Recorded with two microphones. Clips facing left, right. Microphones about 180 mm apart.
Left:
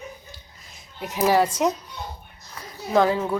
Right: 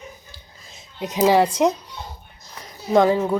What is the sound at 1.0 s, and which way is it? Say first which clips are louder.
Speech: right 3 dB; 20° right (ahead or behind).